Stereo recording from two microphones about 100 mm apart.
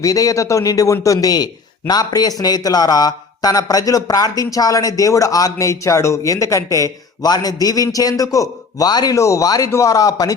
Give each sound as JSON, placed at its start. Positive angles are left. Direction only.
{"t": 0.0, "sound": "a man's voice", "side_deg": 35}